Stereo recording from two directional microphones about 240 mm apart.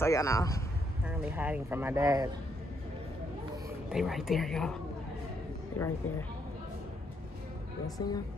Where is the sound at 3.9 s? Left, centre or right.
Centre.